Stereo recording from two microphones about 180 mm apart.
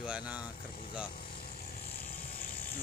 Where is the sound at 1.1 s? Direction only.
55° left (ahead or behind).